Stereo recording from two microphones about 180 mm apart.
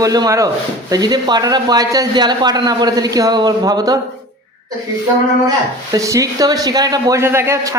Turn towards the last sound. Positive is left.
turn(degrees=-15)  # may be behind; listen again after turning